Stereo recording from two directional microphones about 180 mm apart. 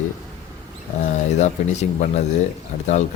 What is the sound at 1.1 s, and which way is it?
Speech, 40° left (ahead or behind).